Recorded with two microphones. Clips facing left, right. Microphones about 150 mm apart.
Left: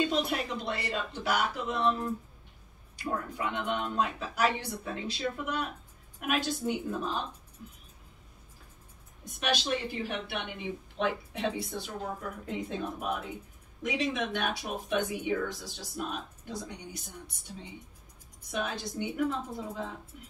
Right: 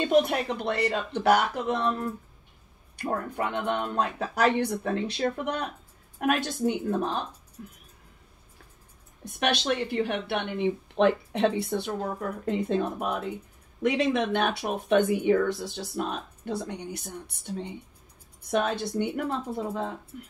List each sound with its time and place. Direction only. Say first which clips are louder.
0.1 s speech: right 8 dB; 60° right (ahead or behind)
3.0 s a woman's voice: right 4 dB; 60° right (ahead or behind)
9.4 s speech: right 4 dB; 65° right (ahead or behind)